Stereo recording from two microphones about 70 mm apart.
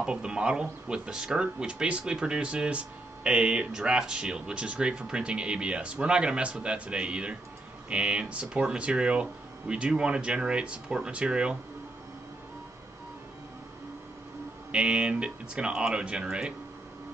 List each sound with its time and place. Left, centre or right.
0.0 s speech: centre
14.7 s speech: centre